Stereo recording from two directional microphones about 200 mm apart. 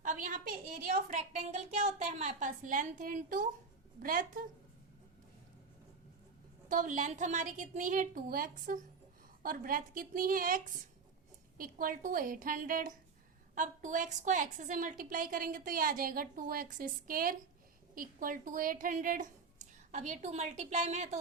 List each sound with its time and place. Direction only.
0.0 s a woman's voice: 40° right (ahead or behind)
6.7 s a woman's voice: 40° right (ahead or behind)